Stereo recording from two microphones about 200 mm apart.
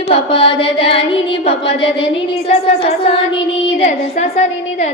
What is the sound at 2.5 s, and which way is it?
A woman's voice, 35° left (ahead or behind).